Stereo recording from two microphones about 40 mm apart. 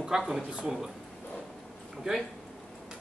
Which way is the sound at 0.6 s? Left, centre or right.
Centre.